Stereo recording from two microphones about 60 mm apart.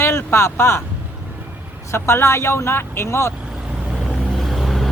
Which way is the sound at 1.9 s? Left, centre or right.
Left.